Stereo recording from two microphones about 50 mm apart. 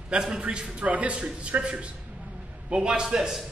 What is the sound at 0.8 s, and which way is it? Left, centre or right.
Speech, right.